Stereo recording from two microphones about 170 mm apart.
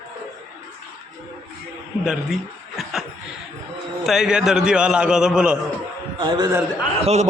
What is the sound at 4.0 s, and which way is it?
A man's voice, centre (ahead or behind).